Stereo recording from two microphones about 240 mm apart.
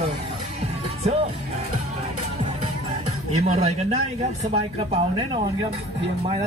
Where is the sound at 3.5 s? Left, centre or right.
Right.